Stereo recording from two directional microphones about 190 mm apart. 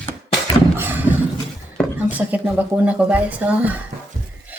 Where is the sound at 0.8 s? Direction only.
10° right (ahead or behind).